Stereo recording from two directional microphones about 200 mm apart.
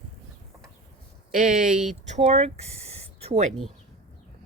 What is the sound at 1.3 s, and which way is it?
Speech, 40° right (ahead or behind).